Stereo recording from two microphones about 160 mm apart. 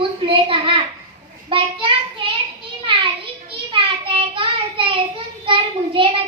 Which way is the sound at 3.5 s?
35° right (ahead or behind).